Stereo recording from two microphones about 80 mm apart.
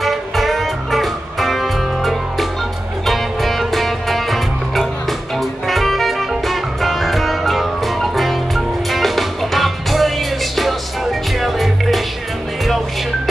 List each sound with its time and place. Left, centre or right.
0.0 s music: centre